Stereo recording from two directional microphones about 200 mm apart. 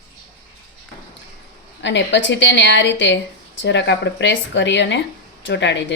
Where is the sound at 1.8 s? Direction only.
65° left (ahead or behind).